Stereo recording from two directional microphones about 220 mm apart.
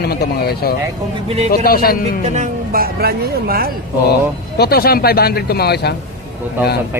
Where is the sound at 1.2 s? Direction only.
25° right (ahead or behind).